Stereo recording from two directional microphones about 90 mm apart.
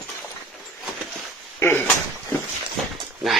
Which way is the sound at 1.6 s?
25° left (ahead or behind).